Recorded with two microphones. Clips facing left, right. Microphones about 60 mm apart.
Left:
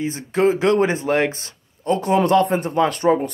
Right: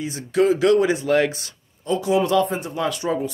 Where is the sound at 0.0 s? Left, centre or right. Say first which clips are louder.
Left 1 dB; left.